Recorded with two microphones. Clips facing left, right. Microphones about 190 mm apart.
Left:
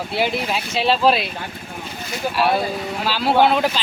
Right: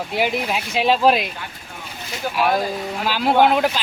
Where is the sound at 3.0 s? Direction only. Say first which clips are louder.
Even; 15° right (ahead or behind).